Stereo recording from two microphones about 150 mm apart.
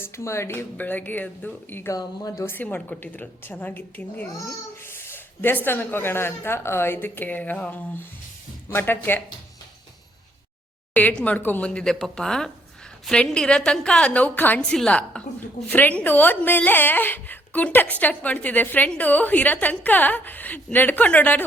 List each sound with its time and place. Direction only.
0.0 s a woman's voice: 15° left (ahead or behind)
10.9 s a woman's voice: 10° left (ahead or behind)